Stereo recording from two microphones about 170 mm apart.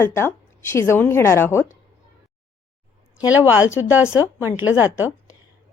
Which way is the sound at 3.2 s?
10° right (ahead or behind).